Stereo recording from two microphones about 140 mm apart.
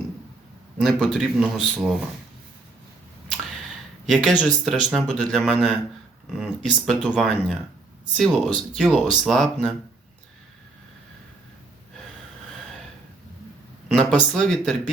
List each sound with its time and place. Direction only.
0.8 s speech: 5° left (ahead or behind)
4.1 s speech: centre (ahead or behind)
13.8 s speech: 5° left (ahead or behind)